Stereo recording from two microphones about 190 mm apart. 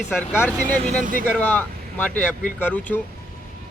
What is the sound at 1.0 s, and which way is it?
Speech, 45° right (ahead or behind).